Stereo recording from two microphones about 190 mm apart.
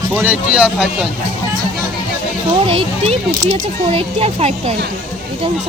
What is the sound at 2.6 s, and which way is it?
Speech, 30° right (ahead or behind).